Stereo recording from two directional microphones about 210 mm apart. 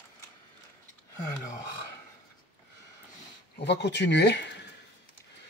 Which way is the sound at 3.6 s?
55° left (ahead or behind).